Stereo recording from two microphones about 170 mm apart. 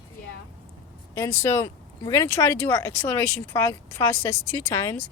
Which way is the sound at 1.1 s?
15° left (ahead or behind).